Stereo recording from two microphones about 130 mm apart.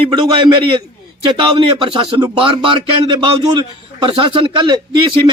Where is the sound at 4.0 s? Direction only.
40° right (ahead or behind).